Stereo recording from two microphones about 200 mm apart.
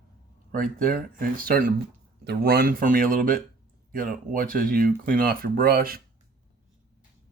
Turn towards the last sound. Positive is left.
turn(degrees=-50)  # may be behind; listen again after turning